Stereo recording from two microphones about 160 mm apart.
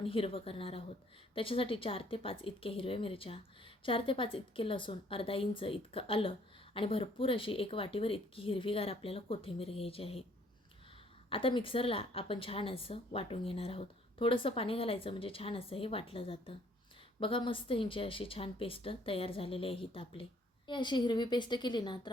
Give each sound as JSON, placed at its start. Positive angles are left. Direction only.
{"t": 0.0, "sound": "a woman's voice", "side_deg": 35}
{"t": 11.3, "sound": "a woman's voice", "side_deg": 35}